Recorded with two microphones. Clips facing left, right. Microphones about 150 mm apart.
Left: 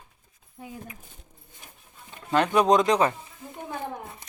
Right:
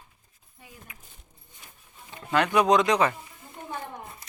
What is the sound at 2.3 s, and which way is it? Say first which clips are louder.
Speech: left 1 dB; 15° left (ahead or behind).